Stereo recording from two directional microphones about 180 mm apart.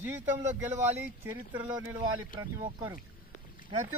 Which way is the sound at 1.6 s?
10° right (ahead or behind).